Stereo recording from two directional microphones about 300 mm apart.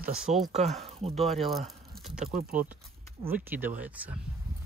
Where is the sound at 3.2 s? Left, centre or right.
Centre.